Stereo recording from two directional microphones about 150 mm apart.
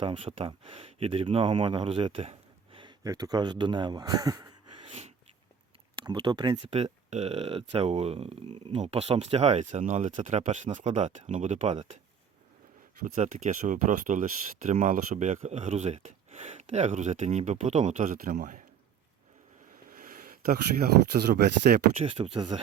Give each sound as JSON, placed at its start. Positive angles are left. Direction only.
{"t": 0.0, "sound": "speech", "side_deg": -35}
{"t": 6.1, "sound": "speech", "side_deg": -30}
{"t": 6.7, "sound": "speech", "side_deg": -50}
{"t": 13.1, "sound": "speech", "side_deg": -55}
{"t": 19.9, "sound": "speech", "side_deg": -75}
{"t": 22.0, "sound": "speech", "side_deg": -35}